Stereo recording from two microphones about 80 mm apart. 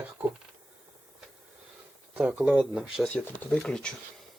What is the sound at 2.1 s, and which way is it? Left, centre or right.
Speech, centre.